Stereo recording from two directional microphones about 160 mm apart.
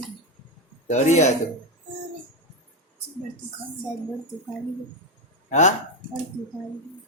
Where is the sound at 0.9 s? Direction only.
45° left (ahead or behind).